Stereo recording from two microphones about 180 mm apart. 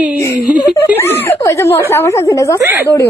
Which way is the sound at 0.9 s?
10° left (ahead or behind).